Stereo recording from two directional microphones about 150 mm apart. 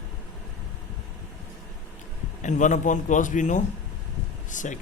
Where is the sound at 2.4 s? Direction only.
55° left (ahead or behind).